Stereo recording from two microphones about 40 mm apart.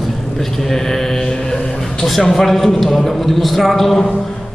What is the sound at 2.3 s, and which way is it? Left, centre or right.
A man's voice, centre.